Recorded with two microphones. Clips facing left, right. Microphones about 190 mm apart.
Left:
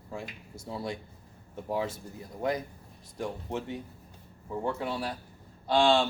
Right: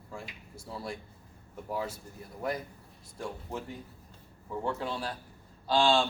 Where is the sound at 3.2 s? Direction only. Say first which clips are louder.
Left 4 dB; 25° left (ahead or behind).